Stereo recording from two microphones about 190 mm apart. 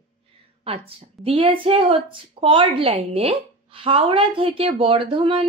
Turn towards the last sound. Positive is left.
turn(degrees=-25)  # may be behind; listen again after turning